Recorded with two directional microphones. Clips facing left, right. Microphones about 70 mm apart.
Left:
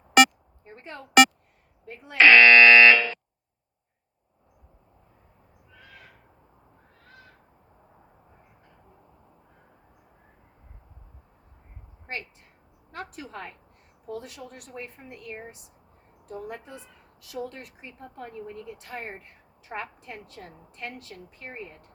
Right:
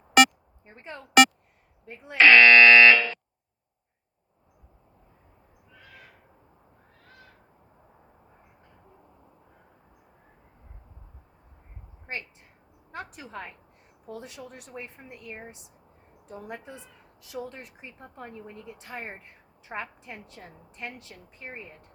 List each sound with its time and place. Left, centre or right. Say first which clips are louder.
0.2 s music: left 1 dB; centre
0.6 s a sound: left 1 dB; centre
1.9 s a woman's voice: even; centre
2.1 s speech: even; centre
12.9 s a woman's voice: left 1 dB; centre